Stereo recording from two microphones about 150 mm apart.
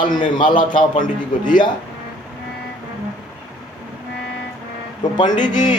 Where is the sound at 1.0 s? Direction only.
60° left (ahead or behind).